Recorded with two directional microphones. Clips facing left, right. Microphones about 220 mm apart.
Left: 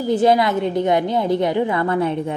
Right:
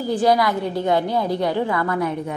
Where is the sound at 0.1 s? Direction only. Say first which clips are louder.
Left 3 dB; 25° left (ahead or behind).